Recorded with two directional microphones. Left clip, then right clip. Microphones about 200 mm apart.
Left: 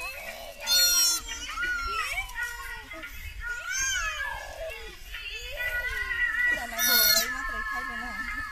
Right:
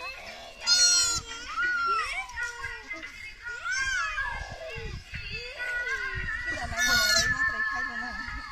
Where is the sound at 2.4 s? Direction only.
Centre (ahead or behind).